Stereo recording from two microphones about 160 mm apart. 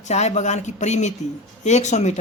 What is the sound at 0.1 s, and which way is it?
A woman's voice, 45° left (ahead or behind).